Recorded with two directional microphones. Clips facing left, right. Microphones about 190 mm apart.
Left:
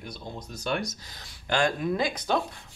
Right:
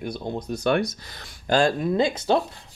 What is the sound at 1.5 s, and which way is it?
Speech, 30° right (ahead or behind).